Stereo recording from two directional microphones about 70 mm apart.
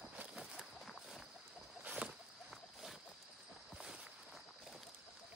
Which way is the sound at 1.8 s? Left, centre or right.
Centre.